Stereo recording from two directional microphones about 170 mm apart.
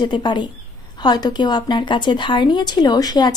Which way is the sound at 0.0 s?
25° left (ahead or behind).